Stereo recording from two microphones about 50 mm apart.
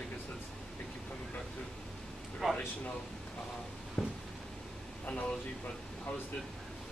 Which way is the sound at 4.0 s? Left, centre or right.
Left.